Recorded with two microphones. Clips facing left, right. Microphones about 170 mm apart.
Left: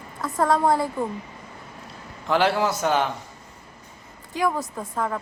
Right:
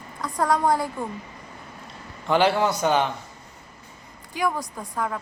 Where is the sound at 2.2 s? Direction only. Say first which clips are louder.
Right 1 dB; centre (ahead or behind).